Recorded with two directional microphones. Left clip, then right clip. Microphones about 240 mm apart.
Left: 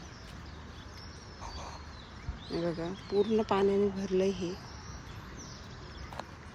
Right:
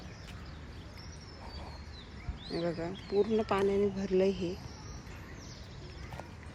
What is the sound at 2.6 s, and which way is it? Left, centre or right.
Speech, centre.